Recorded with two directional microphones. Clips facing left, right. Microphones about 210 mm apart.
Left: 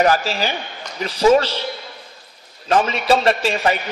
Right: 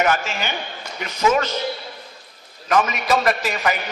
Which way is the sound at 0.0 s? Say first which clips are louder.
Left 4 dB; 35° left (ahead or behind).